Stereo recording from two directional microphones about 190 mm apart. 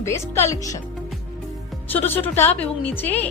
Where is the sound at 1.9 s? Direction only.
10° left (ahead or behind).